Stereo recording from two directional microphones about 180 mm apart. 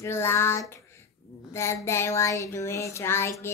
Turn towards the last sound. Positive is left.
turn(degrees=15)  # may be behind; listen again after turning